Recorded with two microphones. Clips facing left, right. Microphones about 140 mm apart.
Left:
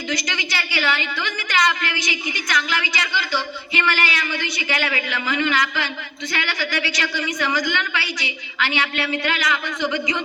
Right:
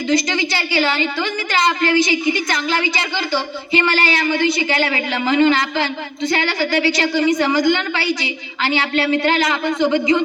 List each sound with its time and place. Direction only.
0.1 s a woman's voice: 30° right (ahead or behind)